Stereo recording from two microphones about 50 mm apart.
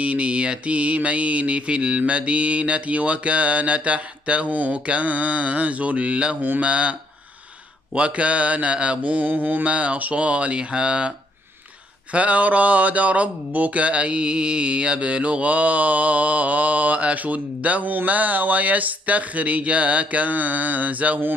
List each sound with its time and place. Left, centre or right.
0.0 s speech: right